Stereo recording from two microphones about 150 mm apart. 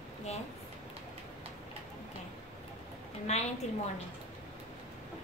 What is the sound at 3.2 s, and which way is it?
Speech, 45° left (ahead or behind).